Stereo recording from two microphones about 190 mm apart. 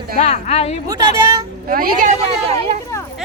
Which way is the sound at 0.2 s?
35° left (ahead or behind).